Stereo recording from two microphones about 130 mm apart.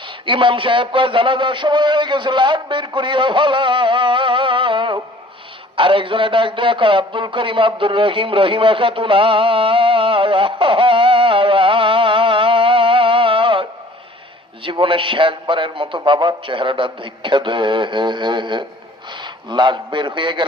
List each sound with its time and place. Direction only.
0.3 s a man's voice: 40° right (ahead or behind)
5.7 s a sound: 40° right (ahead or behind)
14.6 s a man's voice: 40° right (ahead or behind)